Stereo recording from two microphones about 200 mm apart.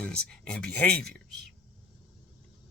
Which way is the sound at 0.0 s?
5° left (ahead or behind).